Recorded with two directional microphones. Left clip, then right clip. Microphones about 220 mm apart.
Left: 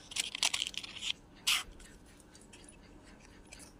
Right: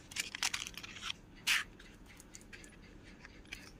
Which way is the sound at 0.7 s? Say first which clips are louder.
Left 5 dB; 35° right (ahead or behind).